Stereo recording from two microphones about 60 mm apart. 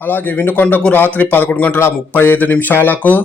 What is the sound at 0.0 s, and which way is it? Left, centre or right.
Speech, left.